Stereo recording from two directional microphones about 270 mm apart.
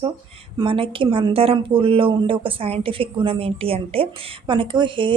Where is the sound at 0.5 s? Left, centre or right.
Centre.